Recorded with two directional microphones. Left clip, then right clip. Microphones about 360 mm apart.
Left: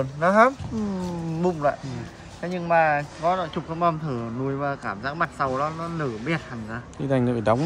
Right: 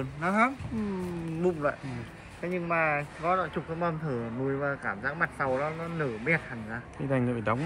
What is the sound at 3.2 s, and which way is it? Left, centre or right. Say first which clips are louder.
Speech: left 3 dB; centre.